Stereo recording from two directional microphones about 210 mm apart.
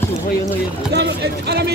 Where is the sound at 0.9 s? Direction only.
50° right (ahead or behind).